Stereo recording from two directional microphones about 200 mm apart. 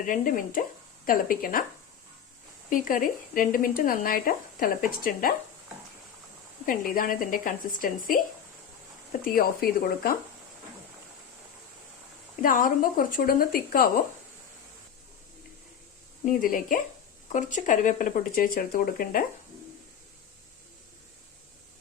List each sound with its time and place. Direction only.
0.0 s speech: 40° left (ahead or behind)
2.6 s speech: 40° left (ahead or behind)
6.7 s speech: 45° left (ahead or behind)
9.2 s speech: 45° left (ahead or behind)
12.4 s speech: 40° left (ahead or behind)
16.2 s speech: 45° left (ahead or behind)